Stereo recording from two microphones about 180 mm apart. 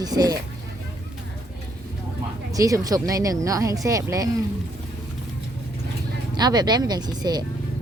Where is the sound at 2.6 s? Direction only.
20° right (ahead or behind).